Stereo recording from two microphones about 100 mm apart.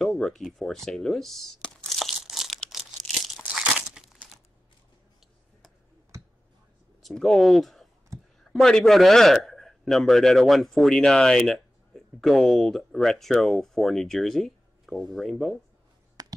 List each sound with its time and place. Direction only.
0.0 s computer keyboard: 5° left (ahead or behind)
3.4 s crumpling: 5° right (ahead or behind)
7.0 s a man's voice: centre (ahead or behind)
16.2 s tap: 40° right (ahead or behind)